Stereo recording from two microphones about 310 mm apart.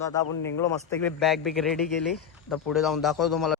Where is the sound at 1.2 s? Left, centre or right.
Centre.